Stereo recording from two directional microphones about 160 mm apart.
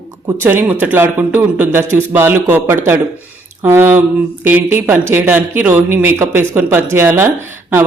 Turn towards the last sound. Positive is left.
turn(degrees=-15)  # may be behind; listen again after turning